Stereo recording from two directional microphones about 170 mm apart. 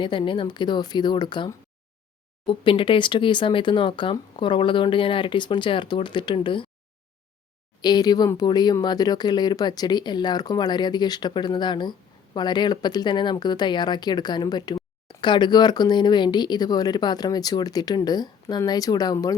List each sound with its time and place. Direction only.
0.0 s speech: 30° left (ahead or behind)
7.8 s speech: 25° left (ahead or behind)